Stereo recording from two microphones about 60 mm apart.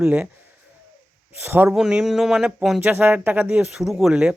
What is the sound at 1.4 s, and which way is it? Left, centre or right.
Speech, right.